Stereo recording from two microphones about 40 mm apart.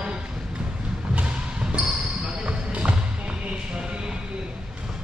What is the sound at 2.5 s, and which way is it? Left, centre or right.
Music, right.